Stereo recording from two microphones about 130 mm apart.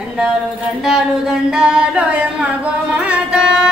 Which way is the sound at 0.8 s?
5° right (ahead or behind).